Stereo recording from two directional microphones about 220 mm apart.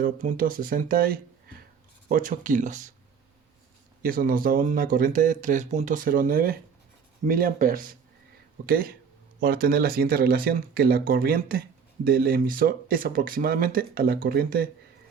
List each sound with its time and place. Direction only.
0.0 s speech: 40° right (ahead or behind)
4.0 s speech: 40° right (ahead or behind)